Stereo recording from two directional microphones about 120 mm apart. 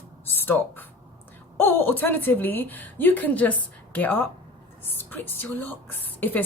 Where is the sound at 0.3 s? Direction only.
15° left (ahead or behind).